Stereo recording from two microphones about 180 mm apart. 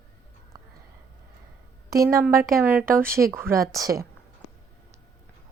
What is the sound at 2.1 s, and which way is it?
A woman's voice, 15° right (ahead or behind).